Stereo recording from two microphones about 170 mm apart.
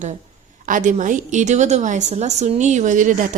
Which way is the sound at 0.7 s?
50° right (ahead or behind).